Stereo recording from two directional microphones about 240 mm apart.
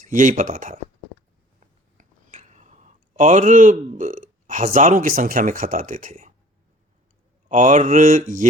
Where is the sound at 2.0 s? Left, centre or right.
Right.